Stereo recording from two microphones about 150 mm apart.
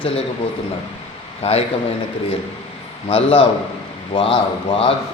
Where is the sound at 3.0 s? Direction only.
40° left (ahead or behind).